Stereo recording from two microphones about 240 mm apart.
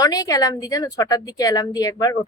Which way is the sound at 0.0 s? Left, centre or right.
Centre.